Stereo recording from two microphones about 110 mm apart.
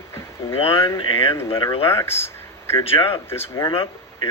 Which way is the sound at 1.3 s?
25° left (ahead or behind).